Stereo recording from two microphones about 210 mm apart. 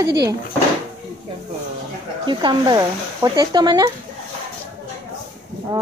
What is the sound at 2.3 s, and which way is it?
Speech, 20° right (ahead or behind).